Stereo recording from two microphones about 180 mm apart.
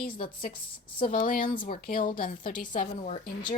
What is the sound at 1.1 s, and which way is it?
Speech, 50° left (ahead or behind).